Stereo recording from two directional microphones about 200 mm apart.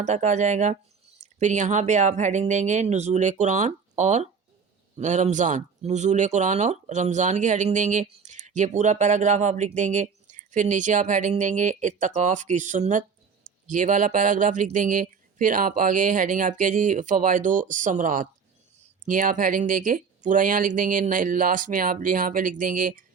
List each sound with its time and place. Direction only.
0.0 s speech: 35° right (ahead or behind)